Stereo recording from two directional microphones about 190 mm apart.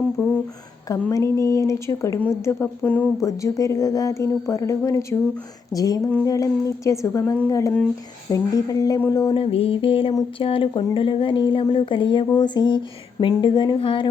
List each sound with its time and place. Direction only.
0.2 s a woman's voice: 15° left (ahead or behind)
9.4 s speech: 30° left (ahead or behind)